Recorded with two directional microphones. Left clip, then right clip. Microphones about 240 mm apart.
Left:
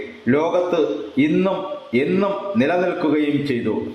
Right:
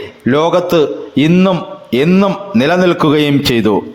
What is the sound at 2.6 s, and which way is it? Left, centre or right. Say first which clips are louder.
Speech: right 9 dB; right.